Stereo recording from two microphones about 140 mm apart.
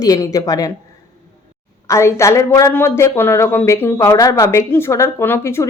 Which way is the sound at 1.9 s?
20° left (ahead or behind).